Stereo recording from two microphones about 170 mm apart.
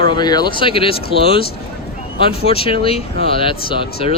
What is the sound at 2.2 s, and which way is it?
Speech, 35° left (ahead or behind).